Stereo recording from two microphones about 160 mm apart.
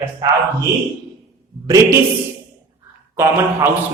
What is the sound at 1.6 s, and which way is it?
Speech, 20° right (ahead or behind).